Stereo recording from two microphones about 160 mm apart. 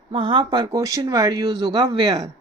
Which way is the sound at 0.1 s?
35° right (ahead or behind).